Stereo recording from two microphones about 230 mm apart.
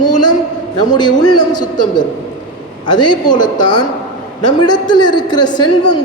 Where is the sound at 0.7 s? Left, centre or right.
Centre.